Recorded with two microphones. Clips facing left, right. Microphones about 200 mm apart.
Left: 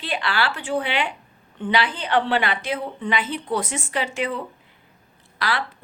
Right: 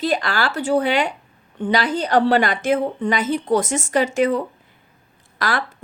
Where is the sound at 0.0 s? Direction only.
40° right (ahead or behind).